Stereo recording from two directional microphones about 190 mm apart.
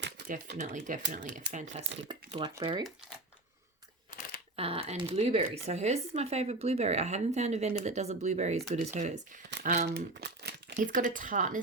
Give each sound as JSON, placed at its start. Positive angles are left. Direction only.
{"t": 0.6, "sound": "speech", "side_deg": -40}
{"t": 2.0, "sound": "speech", "side_deg": -25}
{"t": 4.5, "sound": "speech", "side_deg": -30}
{"t": 9.6, "sound": "crumpling", "side_deg": -50}
{"t": 10.8, "sound": "speech", "side_deg": -45}